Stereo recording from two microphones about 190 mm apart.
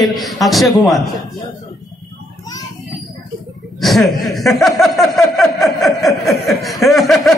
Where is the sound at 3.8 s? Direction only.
Centre (ahead or behind).